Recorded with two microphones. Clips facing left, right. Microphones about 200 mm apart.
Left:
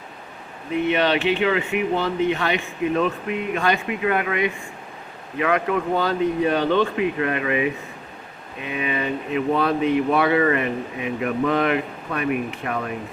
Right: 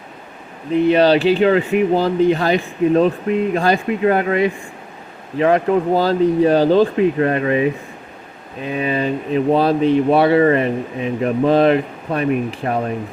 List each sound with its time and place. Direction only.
0.7 s speech: 35° right (ahead or behind)